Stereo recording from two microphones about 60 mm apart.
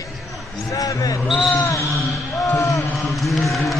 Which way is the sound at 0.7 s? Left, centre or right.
Left.